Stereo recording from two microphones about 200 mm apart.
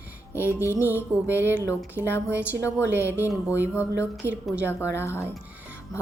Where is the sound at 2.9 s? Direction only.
10° right (ahead or behind).